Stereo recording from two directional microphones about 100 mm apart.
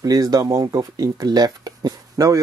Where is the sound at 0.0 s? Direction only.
35° right (ahead or behind).